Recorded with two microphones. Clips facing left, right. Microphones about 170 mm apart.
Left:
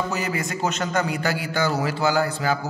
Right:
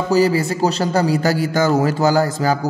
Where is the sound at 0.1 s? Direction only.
35° right (ahead or behind).